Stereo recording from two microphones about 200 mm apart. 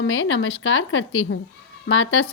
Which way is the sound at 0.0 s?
75° left (ahead or behind).